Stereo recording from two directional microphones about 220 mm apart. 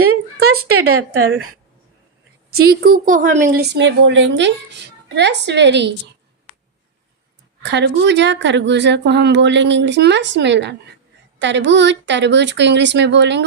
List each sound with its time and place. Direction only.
0.4 s speech: 80° right
2.6 s a woman's voice: 40° right (ahead or behind)
3.8 s a woman's voice: 55° right (ahead or behind)
7.6 s a woman's voice: 50° right (ahead or behind)